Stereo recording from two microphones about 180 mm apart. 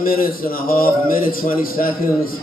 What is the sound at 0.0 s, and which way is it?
A man's voice, 55° left (ahead or behind).